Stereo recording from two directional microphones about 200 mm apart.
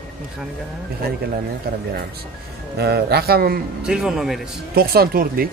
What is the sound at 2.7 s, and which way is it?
Speech, 55° right (ahead or behind).